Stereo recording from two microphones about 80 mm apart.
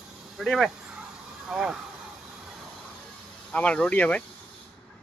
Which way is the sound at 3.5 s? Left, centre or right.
Centre.